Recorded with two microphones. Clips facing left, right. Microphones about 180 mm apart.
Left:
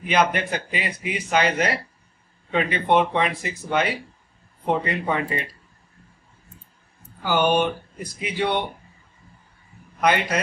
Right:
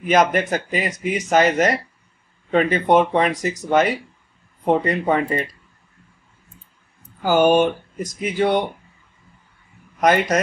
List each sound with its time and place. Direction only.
0.0 s speech: 45° right (ahead or behind)
7.2 s speech: 45° right (ahead or behind)
9.9 s speech: 45° right (ahead or behind)